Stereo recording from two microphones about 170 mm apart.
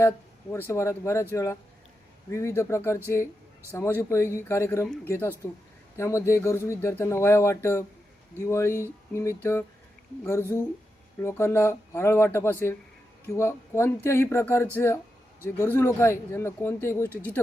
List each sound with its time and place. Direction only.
0.5 s speech: 15° left (ahead or behind)
11.2 s speech: 15° left (ahead or behind)